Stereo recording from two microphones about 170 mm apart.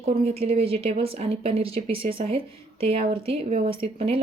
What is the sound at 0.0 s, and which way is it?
A woman's voice, 35° right (ahead or behind).